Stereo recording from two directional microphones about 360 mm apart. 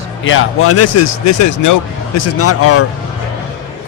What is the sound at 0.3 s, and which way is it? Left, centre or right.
Speech, left.